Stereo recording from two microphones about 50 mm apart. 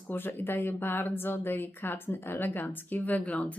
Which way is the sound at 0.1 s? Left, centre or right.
Left.